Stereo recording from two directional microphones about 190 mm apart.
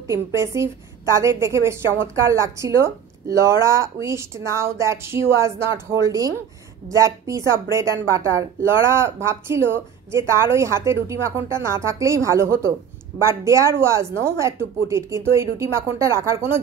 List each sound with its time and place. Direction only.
0.0 s a woman's voice: 15° right (ahead or behind)